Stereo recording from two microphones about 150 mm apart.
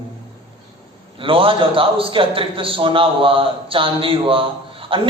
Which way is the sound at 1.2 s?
35° right (ahead or behind).